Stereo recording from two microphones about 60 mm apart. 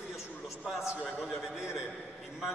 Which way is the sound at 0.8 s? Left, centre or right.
Centre.